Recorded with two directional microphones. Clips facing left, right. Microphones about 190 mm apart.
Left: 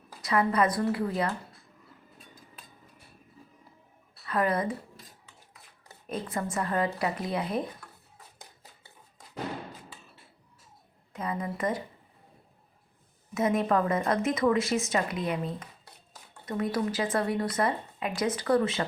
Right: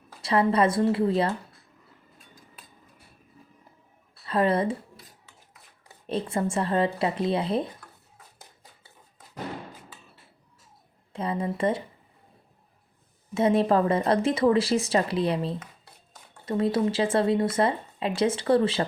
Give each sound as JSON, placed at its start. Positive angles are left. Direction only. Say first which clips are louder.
{"t": 0.2, "sound": "speech", "louder": "right 3 dB", "side_deg": -30}
{"t": 4.3, "sound": "speech", "louder": "right 4 dB", "side_deg": -25}
{"t": 6.1, "sound": "speech", "louder": "right 5 dB", "side_deg": -30}
{"t": 11.1, "sound": "a woman's voice", "louder": "right 4 dB", "side_deg": -30}
{"t": 13.3, "sound": "speech", "louder": "right 4 dB", "side_deg": -30}